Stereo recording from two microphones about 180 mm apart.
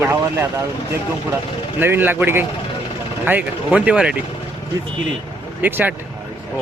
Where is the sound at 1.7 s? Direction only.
10° right (ahead or behind).